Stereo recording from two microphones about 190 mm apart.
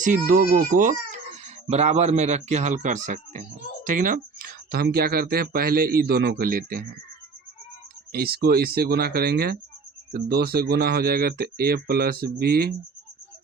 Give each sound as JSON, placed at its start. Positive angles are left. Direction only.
{"t": 0.0, "sound": "speech", "side_deg": -45}
{"t": 8.1, "sound": "speech", "side_deg": -55}